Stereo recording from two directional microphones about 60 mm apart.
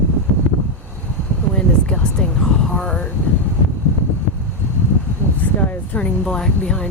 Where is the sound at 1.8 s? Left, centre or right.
Centre.